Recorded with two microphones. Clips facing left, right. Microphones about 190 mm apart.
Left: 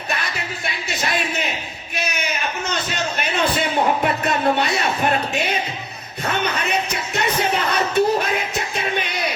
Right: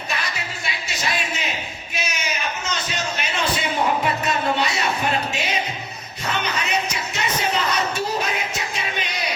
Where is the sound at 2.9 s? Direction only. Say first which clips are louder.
Left 3 dB; 55° left (ahead or behind).